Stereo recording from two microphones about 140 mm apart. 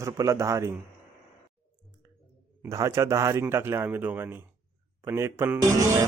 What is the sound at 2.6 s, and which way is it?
A man's voice, 20° right (ahead or behind).